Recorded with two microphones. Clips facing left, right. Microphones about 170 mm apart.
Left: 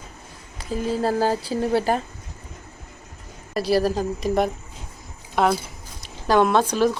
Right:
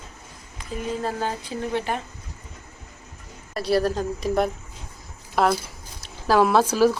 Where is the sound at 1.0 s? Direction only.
35° left (ahead or behind).